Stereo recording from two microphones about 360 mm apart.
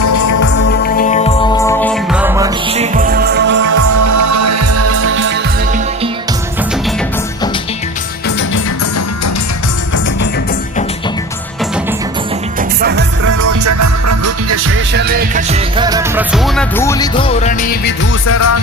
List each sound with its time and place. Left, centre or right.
0.0 s music: left
0.7 s music: left; by 3.6 s right
3.7 s music: right
12.8 s music: right
13.4 s music: right; by 17.9 s left
18.3 s music: left